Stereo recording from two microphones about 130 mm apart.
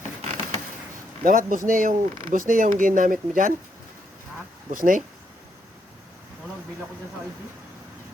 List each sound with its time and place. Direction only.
1.2 s speech: 90° right
4.7 s speech: 90° right